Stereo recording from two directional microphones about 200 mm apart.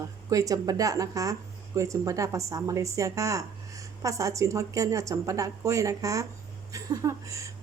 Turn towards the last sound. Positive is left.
turn(degrees=-15)  # may be behind; listen again after turning